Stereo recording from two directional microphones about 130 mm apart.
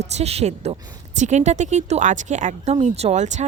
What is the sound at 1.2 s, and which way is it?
A woman's voice, 65° right (ahead or behind).